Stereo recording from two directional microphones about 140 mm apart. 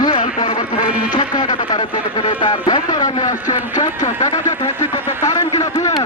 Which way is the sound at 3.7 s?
30° left (ahead or behind).